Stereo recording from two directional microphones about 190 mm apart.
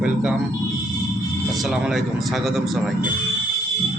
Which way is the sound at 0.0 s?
5° right (ahead or behind).